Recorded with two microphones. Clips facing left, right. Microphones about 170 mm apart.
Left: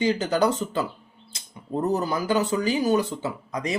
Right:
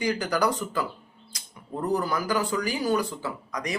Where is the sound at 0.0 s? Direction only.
25° left (ahead or behind).